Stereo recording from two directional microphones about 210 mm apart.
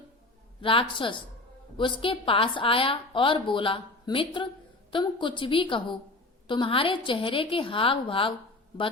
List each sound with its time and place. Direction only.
0.6 s a woman's voice: 25° left (ahead or behind)